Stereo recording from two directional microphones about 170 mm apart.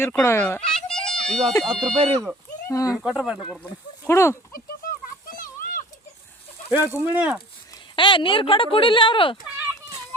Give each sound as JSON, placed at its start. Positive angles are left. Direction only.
{"t": 0.0, "sound": "speech", "side_deg": 15}
{"t": 0.7, "sound": "children playing", "side_deg": 5}
{"t": 1.6, "sound": "speech", "side_deg": 5}
{"t": 2.6, "sound": "speech", "side_deg": 20}
{"t": 3.0, "sound": "speech", "side_deg": -5}
{"t": 3.6, "sound": "speech", "side_deg": 15}
{"t": 5.3, "sound": "a sound", "side_deg": 55}
{"t": 6.7, "sound": "speech", "side_deg": -10}
{"t": 7.9, "sound": "speech", "side_deg": 30}
{"t": 9.4, "sound": "a sound", "side_deg": -20}